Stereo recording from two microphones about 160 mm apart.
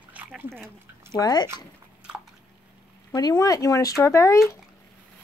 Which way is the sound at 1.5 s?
5° right (ahead or behind).